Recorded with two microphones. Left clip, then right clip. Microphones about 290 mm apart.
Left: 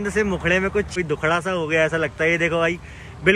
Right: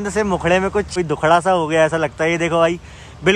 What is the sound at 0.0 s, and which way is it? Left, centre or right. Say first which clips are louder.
Speech: right 3 dB; centre.